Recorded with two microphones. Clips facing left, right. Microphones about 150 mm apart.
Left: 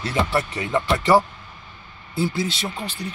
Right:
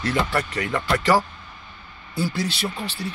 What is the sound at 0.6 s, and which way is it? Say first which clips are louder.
A man's voice: left 1 dB; 25° left (ahead or behind).